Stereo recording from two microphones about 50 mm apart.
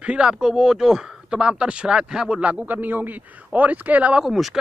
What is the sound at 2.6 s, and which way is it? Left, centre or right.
Speech, right.